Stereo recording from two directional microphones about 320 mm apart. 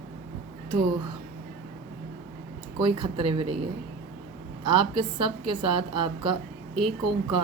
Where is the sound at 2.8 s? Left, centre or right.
Centre.